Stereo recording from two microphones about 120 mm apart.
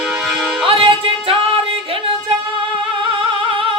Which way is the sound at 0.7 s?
50° right (ahead or behind).